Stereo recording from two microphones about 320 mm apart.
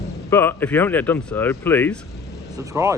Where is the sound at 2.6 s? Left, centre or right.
Centre.